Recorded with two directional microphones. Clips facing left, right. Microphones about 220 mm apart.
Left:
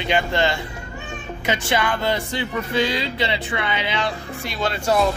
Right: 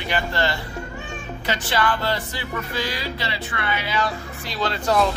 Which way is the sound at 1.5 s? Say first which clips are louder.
Even; 20° left (ahead or behind).